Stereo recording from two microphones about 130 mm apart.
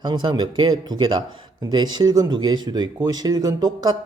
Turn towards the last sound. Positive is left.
turn(degrees=-30)  # may be behind; listen again after turning